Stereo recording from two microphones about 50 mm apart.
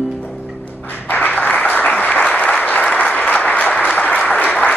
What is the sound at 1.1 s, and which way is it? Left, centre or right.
Applause, left.